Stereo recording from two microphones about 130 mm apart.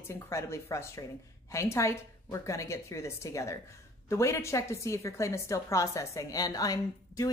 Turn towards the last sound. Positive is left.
turn(degrees=25)  # may be behind; listen again after turning